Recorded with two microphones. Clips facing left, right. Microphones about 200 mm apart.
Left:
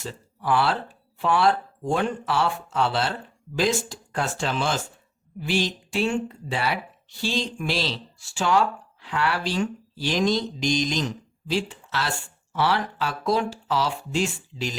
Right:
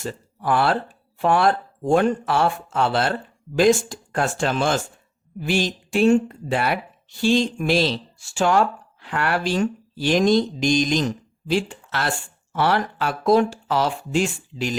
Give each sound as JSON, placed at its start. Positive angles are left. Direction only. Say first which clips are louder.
{"t": 0.0, "sound": "speech", "louder": "right 4 dB", "side_deg": -50}